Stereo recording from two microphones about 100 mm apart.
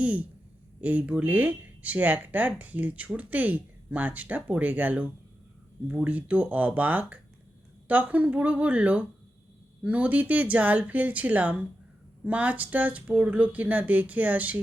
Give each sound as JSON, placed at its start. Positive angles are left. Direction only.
{"t": 0.0, "sound": "speech", "side_deg": -15}